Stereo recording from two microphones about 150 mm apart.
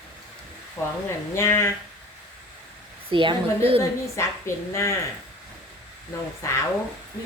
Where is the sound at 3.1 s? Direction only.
35° right (ahead or behind).